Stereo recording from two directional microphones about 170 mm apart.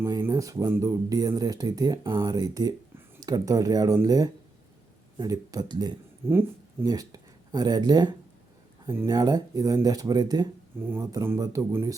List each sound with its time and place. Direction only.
0.0 s speech: 15° right (ahead or behind)
6.2 s speech: 15° right (ahead or behind)